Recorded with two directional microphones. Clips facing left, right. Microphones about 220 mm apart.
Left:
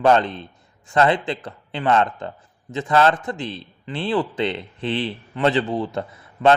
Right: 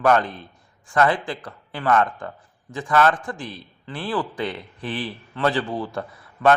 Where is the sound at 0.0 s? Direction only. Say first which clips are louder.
Left 2 dB; 25° left (ahead or behind).